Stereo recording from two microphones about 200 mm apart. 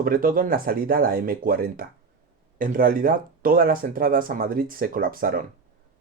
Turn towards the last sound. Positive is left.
turn(degrees=-45)  # may be behind; listen again after turning